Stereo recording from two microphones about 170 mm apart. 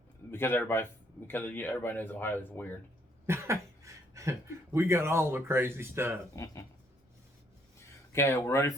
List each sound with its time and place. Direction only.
0.3 s speech: 15° left (ahead or behind)
3.2 s speech: 15° right (ahead or behind)
6.3 s speech: 20° left (ahead or behind)
8.1 s speech: 15° left (ahead or behind)